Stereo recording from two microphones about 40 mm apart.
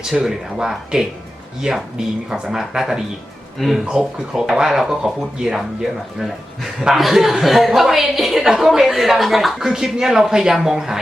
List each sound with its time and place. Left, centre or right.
0.0 s speech: centre
0.3 s speech: centre
1.7 s speech: right